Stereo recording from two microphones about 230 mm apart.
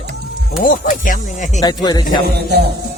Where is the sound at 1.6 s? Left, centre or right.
Centre.